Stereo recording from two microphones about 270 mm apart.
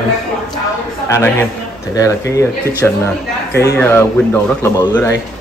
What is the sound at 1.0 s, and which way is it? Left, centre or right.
Speech, centre.